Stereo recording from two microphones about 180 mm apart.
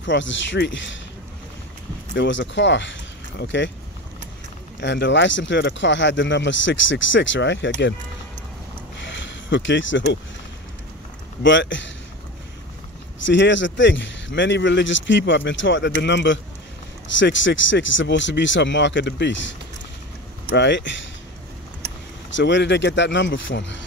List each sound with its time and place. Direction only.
0.0 s speech: 90° left
2.1 s speech: 90° left
4.7 s speech: 75° left (ahead or behind)
9.0 s a sound: 90° left
11.4 s speech: 90° left
13.2 s speech: 90° left
16.0 s speech: 80° left
17.2 s speech: 90° left
20.5 s speech: 75° left (ahead or behind)
22.3 s speech: 80° left